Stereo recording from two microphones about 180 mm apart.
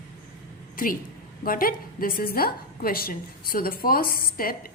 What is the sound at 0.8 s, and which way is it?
A woman's voice, 50° left (ahead or behind).